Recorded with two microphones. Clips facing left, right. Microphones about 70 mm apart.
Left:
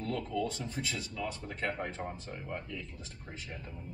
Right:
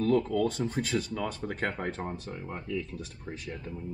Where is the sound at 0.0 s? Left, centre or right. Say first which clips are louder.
Right 9 dB; right.